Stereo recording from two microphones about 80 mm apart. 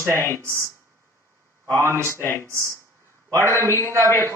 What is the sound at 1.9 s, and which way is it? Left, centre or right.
Speech, right.